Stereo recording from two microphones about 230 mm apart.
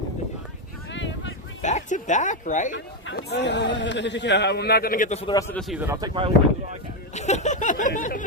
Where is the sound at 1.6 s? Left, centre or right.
Left.